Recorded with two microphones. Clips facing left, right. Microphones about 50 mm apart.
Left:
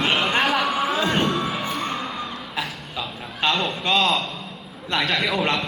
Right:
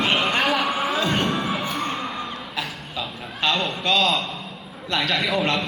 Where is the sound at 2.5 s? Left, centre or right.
Centre.